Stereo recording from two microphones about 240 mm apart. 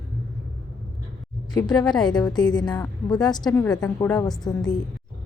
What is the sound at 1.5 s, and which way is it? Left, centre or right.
A woman's voice, centre.